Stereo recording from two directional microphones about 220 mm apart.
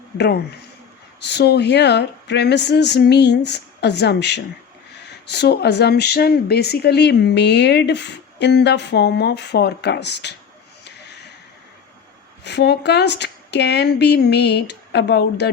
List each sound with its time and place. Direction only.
1.3 s speech: 50° left (ahead or behind)
12.5 s speech: 50° left (ahead or behind)